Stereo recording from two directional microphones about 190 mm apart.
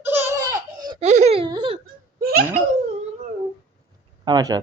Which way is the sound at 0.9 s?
35° right (ahead or behind).